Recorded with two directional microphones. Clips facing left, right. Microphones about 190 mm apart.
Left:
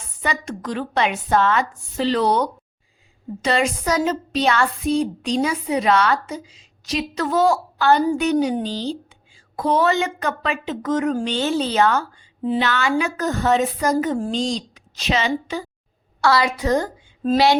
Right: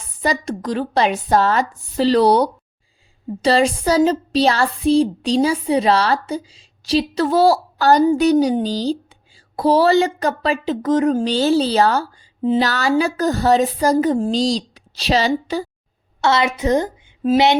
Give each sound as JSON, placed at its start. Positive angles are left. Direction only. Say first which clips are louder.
{"t": 0.2, "sound": "a woman's voice", "louder": "right 5 dB", "side_deg": -35}
{"t": 16.2, "sound": "a woman's voice", "louder": "right 1 dB", "side_deg": -25}